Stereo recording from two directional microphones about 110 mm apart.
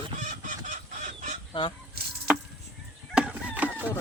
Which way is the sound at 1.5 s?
45° left (ahead or behind).